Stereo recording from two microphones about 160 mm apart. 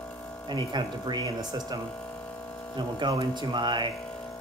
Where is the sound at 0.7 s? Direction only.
30° right (ahead or behind).